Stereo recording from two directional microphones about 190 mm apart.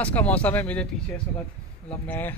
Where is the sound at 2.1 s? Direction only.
10° left (ahead or behind).